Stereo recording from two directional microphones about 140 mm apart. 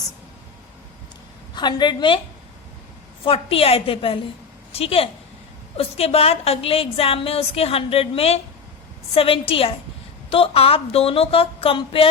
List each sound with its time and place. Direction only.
1.5 s a woman's voice: 30° left (ahead or behind)
3.2 s a woman's voice: 45° left (ahead or behind)